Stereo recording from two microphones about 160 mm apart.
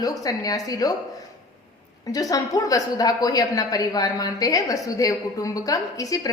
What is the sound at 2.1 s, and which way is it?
A woman's voice, 20° left (ahead or behind).